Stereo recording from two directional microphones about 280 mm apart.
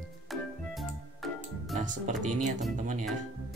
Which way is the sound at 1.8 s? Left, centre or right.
Right.